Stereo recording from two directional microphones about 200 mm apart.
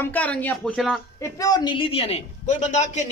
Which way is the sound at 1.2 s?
20° left (ahead or behind).